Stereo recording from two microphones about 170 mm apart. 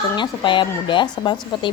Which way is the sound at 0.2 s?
30° left (ahead or behind).